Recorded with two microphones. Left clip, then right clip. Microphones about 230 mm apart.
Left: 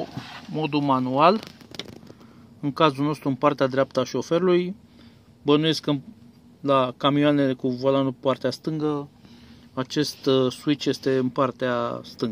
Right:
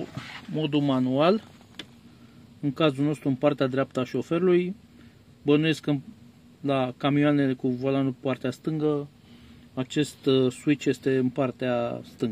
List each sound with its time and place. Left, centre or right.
0.5 s speech: centre
2.6 s speech: centre